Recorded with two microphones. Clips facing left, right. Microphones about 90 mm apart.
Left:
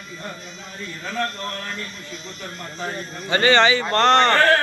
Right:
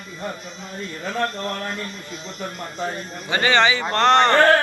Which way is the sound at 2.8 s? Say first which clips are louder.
Right 1 dB; 15° right (ahead or behind).